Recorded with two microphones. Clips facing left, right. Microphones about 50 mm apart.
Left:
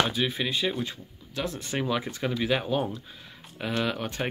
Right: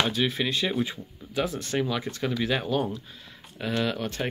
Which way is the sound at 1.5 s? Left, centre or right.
Centre.